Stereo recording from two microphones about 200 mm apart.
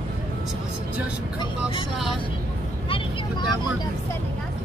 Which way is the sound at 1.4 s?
25° left (ahead or behind).